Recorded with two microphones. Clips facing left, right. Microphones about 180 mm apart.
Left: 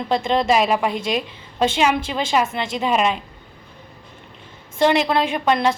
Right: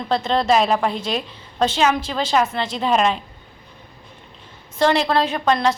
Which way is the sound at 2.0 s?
10° left (ahead or behind).